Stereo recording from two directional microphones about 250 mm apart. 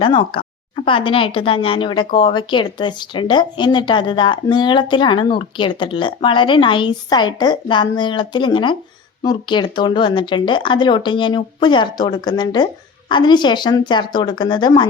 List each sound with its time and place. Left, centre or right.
0.0 s speech: centre